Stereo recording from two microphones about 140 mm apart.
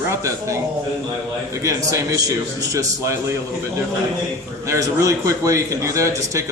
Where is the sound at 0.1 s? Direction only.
20° right (ahead or behind).